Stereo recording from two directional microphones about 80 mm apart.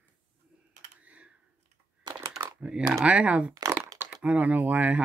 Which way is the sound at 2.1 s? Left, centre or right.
Right.